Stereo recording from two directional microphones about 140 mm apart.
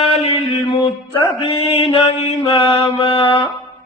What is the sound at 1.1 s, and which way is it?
Mantra, 40° left (ahead or behind).